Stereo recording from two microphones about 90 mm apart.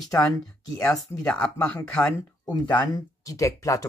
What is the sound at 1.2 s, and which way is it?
Speech, 10° left (ahead or behind).